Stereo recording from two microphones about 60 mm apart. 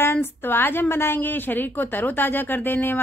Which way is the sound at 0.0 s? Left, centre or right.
Left.